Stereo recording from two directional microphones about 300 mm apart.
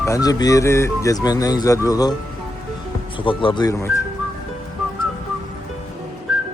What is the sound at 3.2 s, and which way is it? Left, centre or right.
Speech, centre.